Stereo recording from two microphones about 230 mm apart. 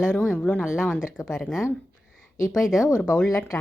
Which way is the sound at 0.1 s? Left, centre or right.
Centre.